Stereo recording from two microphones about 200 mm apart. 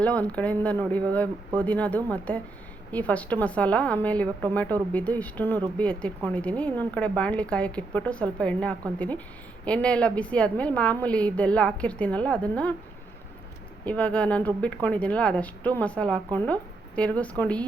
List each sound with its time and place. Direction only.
0.0 s a woman's voice: 5° left (ahead or behind)
13.8 s speech: 5° left (ahead or behind)